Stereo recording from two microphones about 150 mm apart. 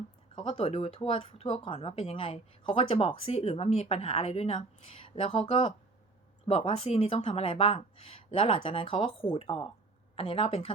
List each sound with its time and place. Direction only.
0.3 s speech: 35° left (ahead or behind)